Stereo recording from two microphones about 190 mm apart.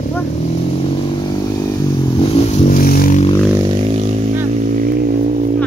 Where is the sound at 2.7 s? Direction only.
50° left (ahead or behind).